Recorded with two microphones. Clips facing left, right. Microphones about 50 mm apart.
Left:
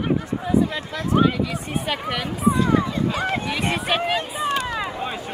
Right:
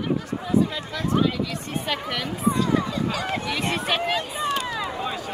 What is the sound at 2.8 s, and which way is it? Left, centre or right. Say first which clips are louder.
Speech: left 3 dB; left.